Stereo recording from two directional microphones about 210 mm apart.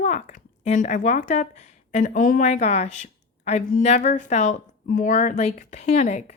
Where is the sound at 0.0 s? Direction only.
35° left (ahead or behind).